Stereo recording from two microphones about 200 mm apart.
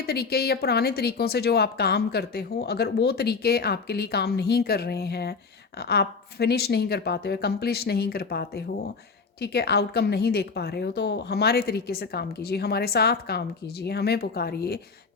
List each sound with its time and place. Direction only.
0.0 s a woman's voice: 50° left (ahead or behind)